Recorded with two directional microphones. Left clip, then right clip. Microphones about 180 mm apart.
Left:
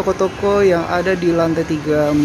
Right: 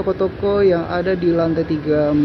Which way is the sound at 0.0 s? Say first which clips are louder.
Left 2 dB; 30° left (ahead or behind).